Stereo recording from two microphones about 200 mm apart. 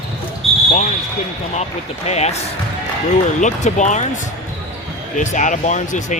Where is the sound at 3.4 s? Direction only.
35° left (ahead or behind).